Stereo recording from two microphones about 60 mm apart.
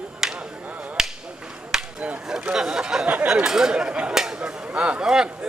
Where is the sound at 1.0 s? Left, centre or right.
Centre.